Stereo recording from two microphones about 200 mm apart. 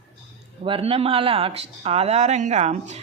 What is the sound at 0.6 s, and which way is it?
Speech, 25° right (ahead or behind).